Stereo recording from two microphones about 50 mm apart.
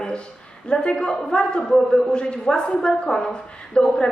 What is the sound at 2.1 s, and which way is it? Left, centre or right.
A woman's voice, centre.